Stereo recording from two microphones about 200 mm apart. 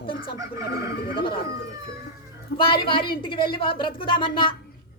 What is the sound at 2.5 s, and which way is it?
A woman's voice, 25° left (ahead or behind).